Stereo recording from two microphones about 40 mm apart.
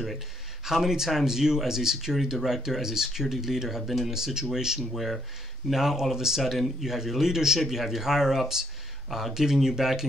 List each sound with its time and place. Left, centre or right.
0.7 s speech: centre
4.9 s speech: centre